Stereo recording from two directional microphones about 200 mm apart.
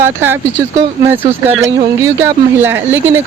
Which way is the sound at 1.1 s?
10° right (ahead or behind).